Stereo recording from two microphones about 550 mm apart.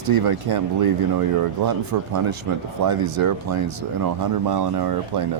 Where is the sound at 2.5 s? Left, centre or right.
Right.